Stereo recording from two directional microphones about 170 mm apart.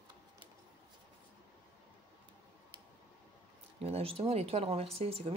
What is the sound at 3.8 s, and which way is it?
Speech, 35° right (ahead or behind).